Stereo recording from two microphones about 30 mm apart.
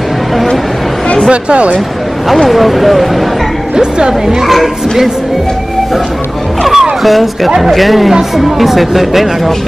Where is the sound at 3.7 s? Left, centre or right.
Right.